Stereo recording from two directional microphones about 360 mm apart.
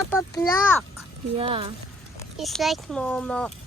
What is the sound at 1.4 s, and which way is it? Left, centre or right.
Speech, centre.